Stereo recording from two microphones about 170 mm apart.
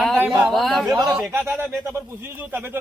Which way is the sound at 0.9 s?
20° right (ahead or behind).